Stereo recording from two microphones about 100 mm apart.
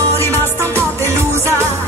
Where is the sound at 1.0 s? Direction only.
25° right (ahead or behind).